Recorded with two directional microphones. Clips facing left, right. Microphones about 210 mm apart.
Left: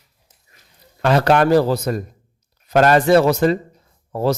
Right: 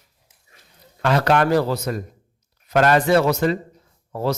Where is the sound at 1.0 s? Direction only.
35° left (ahead or behind).